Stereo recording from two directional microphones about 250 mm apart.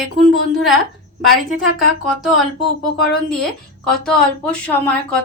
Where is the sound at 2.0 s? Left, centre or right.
Centre.